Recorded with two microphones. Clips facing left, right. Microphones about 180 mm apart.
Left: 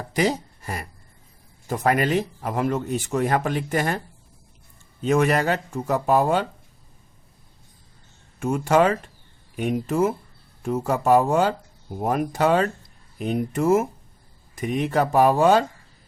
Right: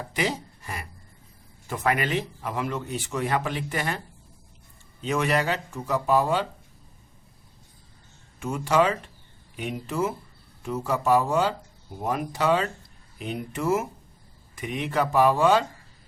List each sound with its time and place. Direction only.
0.1 s speech: 40° left (ahead or behind)
8.4 s speech: 50° left (ahead or behind)